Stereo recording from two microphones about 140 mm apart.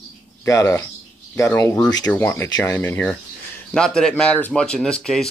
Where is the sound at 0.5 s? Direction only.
20° left (ahead or behind).